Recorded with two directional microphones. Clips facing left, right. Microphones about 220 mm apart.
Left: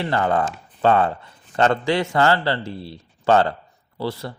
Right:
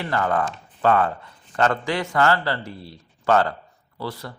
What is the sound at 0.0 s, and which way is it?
Speech, 25° left (ahead or behind).